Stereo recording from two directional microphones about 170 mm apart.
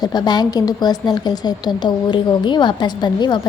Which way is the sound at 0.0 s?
25° left (ahead or behind).